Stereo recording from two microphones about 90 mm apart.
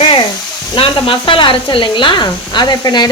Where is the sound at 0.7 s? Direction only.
70° left (ahead or behind).